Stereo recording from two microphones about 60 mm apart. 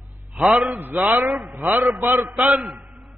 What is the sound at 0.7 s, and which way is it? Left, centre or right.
Speech, right.